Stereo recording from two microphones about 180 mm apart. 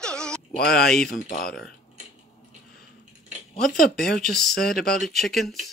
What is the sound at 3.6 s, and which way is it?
Speech, centre (ahead or behind).